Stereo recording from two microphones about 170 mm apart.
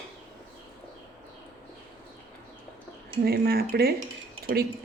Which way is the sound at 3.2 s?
65° right (ahead or behind).